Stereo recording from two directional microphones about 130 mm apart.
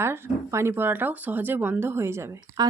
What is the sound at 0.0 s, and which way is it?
A woman's voice, 20° right (ahead or behind).